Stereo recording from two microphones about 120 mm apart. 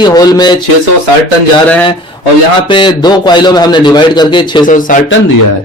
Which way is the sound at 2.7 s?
40° left (ahead or behind).